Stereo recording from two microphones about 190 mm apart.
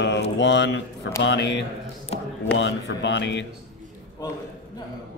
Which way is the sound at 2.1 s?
35° left (ahead or behind).